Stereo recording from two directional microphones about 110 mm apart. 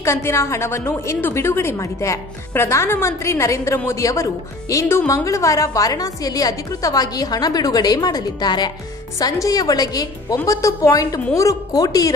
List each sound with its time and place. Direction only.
0.0 s a woman's voice: 25° left (ahead or behind)